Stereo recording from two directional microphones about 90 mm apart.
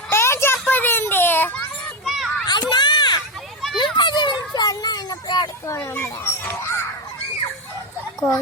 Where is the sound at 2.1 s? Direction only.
Centre (ahead or behind).